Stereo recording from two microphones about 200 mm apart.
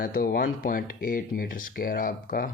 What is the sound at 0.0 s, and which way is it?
Speech, 45° left (ahead or behind).